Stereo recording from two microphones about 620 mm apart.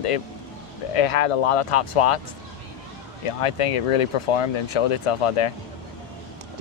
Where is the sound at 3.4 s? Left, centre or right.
Left.